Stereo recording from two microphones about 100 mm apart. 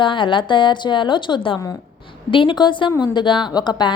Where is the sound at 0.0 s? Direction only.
55° left (ahead or behind).